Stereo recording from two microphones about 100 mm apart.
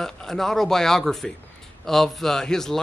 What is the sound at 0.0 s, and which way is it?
Speech, 5° left (ahead or behind).